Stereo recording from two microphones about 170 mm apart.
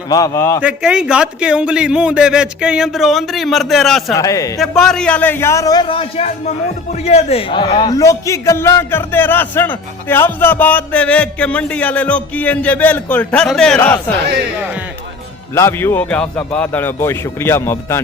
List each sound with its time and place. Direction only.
0.1 s a man's voice: 20° left (ahead or behind)
0.6 s a man's voice: 5° right (ahead or behind)
4.1 s a man's voice: 20° left (ahead or behind)
4.6 s a man's voice: centre (ahead or behind); by 7.9 s 30° left (ahead or behind)
7.9 s a man's voice: 20° left (ahead or behind); by 13.7 s 5° left (ahead or behind)
15.5 s a man's voice: 15° left (ahead or behind)